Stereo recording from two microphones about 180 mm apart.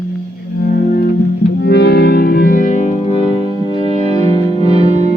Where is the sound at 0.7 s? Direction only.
60° left (ahead or behind); by 4.2 s 30° left (ahead or behind).